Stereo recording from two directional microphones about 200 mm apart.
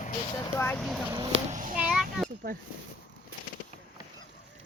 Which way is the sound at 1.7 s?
5° right (ahead or behind).